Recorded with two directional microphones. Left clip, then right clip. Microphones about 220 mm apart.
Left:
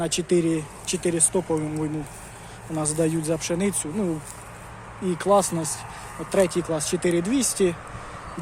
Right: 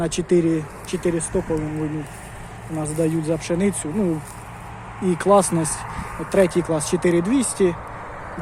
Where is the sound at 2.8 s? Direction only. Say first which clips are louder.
Right 2 dB; 15° left (ahead or behind).